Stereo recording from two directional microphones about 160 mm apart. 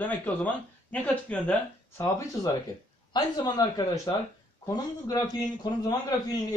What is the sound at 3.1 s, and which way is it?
A man's voice, 25° left (ahead or behind).